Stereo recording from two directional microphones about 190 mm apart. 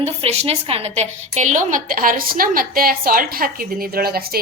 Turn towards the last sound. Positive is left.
turn(degrees=-55)  # may be behind; listen again after turning